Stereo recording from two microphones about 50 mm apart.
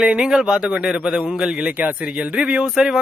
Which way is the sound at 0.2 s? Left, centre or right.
Centre.